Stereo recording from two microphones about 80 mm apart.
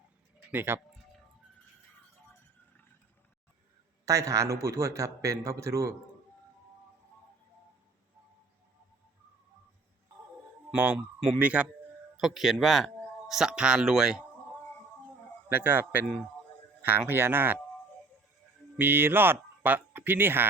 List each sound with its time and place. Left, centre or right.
0.5 s speech: right
4.0 s a man's voice: right
10.8 s speech: right
12.1 s speech: centre
15.4 s speech: right
17.1 s speech: right
18.8 s speech: right